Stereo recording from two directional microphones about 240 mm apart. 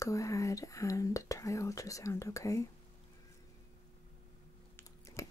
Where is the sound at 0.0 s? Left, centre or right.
Centre.